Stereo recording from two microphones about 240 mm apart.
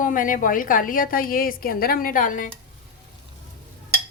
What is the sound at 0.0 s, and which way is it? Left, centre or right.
A woman's voice, left.